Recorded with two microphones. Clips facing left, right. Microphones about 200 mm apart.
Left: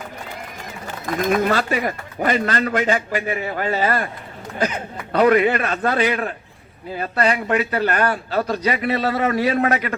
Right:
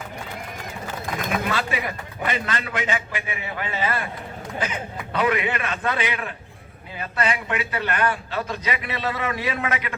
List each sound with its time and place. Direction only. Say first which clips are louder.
1.5 s a man's voice: left 6 dB; 45° left (ahead or behind)